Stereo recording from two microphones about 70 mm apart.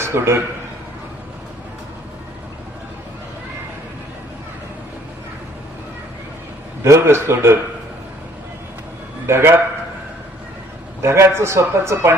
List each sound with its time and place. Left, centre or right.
0.0 s a man's voice: right
6.8 s speech: right
9.2 s speech: right
11.0 s speech: right